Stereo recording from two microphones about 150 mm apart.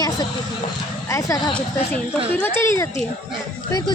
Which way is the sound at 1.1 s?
25° left (ahead or behind).